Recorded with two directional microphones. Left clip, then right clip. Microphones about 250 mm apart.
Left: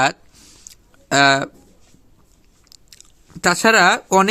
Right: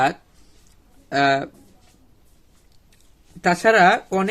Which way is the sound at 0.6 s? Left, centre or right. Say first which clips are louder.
Left 13 dB; left.